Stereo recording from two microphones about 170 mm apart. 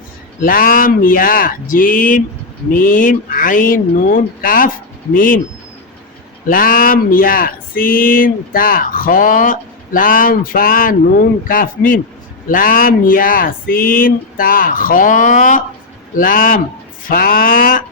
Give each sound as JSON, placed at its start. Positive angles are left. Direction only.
{"t": 0.3, "sound": "speech", "side_deg": 55}
{"t": 6.5, "sound": "speech", "side_deg": 55}